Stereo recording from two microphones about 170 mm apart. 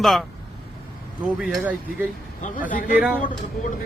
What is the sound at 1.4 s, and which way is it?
Speech, 5° right (ahead or behind).